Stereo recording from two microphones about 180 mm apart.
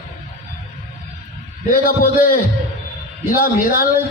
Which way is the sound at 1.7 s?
50° left (ahead or behind).